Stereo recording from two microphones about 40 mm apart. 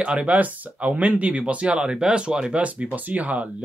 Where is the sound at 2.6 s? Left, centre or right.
Right.